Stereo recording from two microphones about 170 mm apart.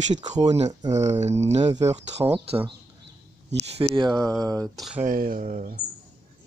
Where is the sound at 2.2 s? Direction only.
10° right (ahead or behind).